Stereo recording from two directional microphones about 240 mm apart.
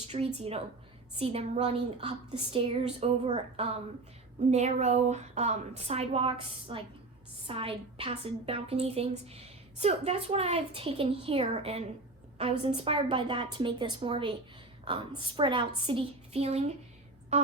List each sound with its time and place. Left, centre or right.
0.3 s a woman's voice: right